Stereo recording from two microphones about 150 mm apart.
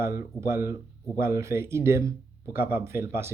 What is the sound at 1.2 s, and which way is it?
Speech, 20° right (ahead or behind).